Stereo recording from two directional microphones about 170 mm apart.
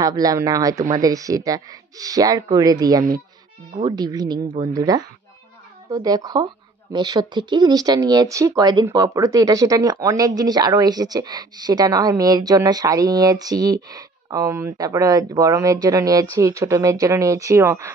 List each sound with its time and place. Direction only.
0.0 s speech: 20° right (ahead or behind)